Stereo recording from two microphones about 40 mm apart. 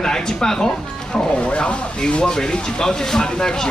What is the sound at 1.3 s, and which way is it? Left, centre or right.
Speech, left.